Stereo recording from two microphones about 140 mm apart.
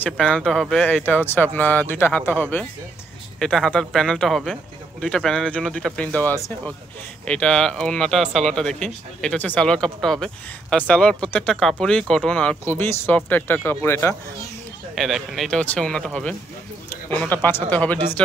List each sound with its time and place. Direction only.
0.0 s speech: 5° left (ahead or behind)
1.0 s speech: 15° left (ahead or behind)
3.3 s speech: 5° left (ahead or behind)
15.0 s speech: centre (ahead or behind)